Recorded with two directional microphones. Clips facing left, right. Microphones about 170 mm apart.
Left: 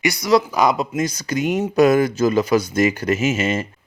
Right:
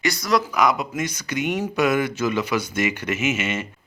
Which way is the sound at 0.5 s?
30° left (ahead or behind).